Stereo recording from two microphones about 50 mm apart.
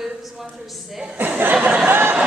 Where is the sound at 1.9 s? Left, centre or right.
Right.